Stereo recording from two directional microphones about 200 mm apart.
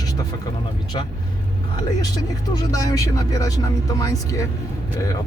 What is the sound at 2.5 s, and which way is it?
Speech, 20° left (ahead or behind).